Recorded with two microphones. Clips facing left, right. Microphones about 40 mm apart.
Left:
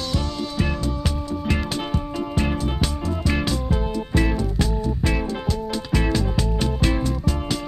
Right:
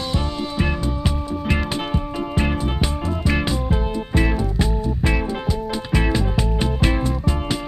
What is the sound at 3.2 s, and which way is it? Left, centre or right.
Music, centre.